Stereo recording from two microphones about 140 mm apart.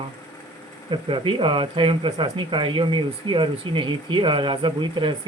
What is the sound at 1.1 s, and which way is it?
Speech, 35° right (ahead or behind).